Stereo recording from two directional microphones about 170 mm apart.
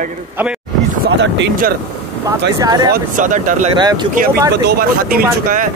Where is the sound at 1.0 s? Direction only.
90° right.